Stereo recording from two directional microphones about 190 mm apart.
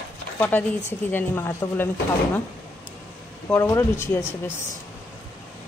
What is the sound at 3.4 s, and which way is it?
Speech, 15° left (ahead or behind).